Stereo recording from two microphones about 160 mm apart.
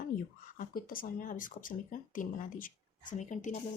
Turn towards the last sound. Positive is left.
turn(degrees=50)  # may be behind; listen again after turning